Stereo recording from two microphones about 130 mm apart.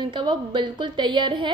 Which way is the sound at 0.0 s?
40° right (ahead or behind).